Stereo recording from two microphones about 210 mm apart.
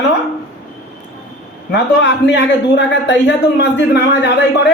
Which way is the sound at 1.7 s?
55° left (ahead or behind).